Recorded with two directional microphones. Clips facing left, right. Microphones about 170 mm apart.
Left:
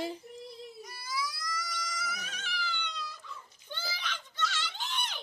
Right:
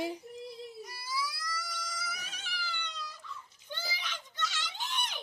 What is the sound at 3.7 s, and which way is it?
Screaming, 10° right (ahead or behind).